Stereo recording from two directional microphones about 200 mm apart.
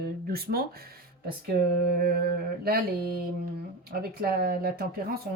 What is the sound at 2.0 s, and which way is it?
Speech, 50° right (ahead or behind).